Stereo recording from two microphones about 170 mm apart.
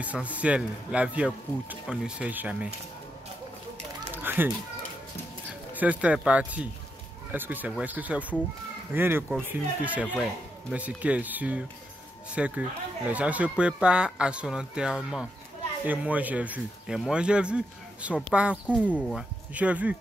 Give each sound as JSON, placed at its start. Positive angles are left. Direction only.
{"t": 0.0, "sound": "speech", "side_deg": -10}
{"t": 4.1, "sound": "chicken", "side_deg": -10}
{"t": 5.7, "sound": "speech", "side_deg": -10}